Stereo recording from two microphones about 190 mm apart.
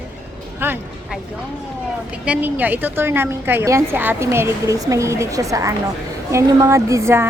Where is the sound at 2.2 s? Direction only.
5° right (ahead or behind).